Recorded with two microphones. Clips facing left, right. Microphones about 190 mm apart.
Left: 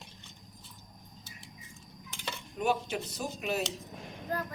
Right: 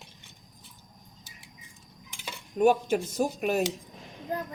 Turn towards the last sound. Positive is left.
turn(degrees=-20)  # may be behind; listen again after turning